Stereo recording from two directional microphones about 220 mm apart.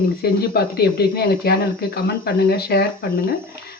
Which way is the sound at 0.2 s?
45° left (ahead or behind).